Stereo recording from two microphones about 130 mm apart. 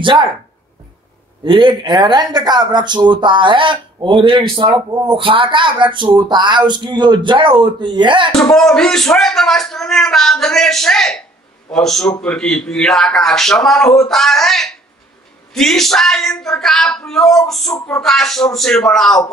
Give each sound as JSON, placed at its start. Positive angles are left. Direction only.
{"t": 0.0, "sound": "speech", "side_deg": -40}
{"t": 1.4, "sound": "speech", "side_deg": -35}
{"t": 8.5, "sound": "a man's voice", "side_deg": 5}